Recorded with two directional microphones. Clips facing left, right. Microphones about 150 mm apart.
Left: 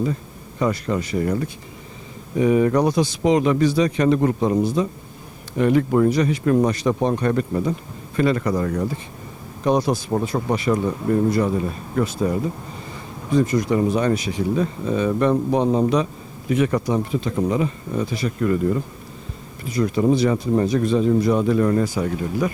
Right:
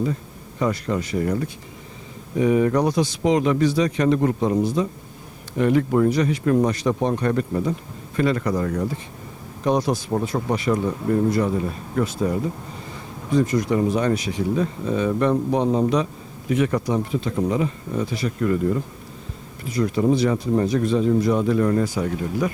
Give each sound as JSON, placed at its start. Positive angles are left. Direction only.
{"t": 0.6, "sound": "speech", "side_deg": 20}
{"t": 2.4, "sound": "speech", "side_deg": 20}
{"t": 19.8, "sound": "speech", "side_deg": 25}